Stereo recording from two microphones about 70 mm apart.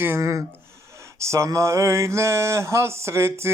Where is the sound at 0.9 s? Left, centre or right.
Right.